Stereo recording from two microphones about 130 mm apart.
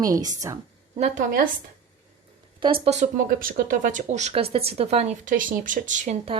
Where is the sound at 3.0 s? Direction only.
90° right; by 5.1 s 55° right (ahead or behind).